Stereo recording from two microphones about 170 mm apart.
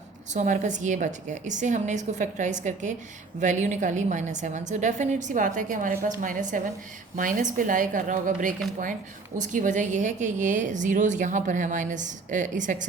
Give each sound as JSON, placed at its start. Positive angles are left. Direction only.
{"t": 0.3, "sound": "a woman's voice", "side_deg": -50}